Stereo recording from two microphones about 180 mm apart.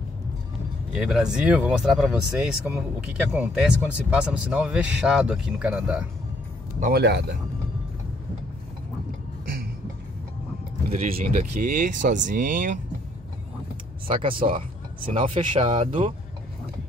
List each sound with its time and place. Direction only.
0.9 s speech: 5° right (ahead or behind)
6.8 s a man's voice: 65° right (ahead or behind)
11.1 s speech: 40° right (ahead or behind)
14.1 s speech: 30° right (ahead or behind)